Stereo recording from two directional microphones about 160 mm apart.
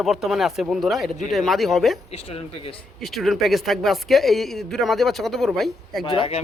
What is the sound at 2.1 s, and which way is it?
Speech, 35° left (ahead or behind).